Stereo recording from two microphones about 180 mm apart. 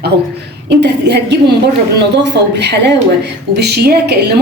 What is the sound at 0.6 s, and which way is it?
A woman's voice, 70° right (ahead or behind).